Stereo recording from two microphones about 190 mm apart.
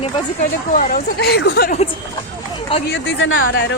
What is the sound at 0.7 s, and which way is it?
Speech, 55° left (ahead or behind).